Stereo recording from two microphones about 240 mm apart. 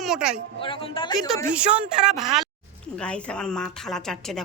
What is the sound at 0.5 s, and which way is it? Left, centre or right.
Speech, left.